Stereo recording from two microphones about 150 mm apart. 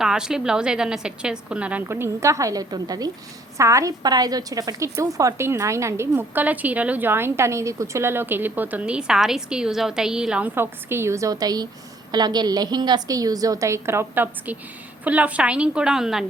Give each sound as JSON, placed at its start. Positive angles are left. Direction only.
{"t": 0.0, "sound": "a woman's voice", "side_deg": -5}